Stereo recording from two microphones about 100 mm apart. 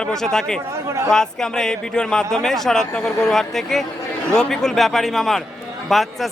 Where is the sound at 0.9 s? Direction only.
30° right (ahead or behind).